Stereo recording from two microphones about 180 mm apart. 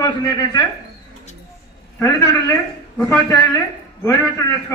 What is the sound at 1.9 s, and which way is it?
A man's voice, 15° left (ahead or behind).